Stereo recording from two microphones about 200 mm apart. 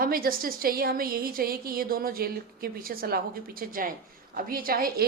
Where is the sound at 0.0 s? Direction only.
45° right (ahead or behind).